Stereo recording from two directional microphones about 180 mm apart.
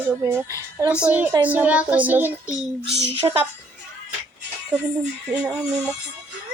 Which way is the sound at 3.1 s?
30° right (ahead or behind).